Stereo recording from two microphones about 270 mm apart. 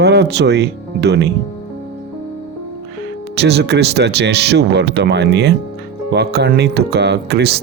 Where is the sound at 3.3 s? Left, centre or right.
Right.